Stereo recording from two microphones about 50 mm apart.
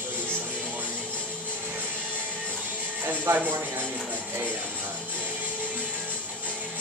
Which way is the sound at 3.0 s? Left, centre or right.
Right.